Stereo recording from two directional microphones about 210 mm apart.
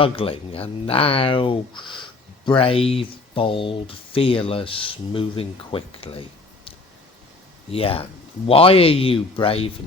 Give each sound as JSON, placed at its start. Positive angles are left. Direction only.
{"t": 0.0, "sound": "speech", "side_deg": 25}
{"t": 7.7, "sound": "speech", "side_deg": 25}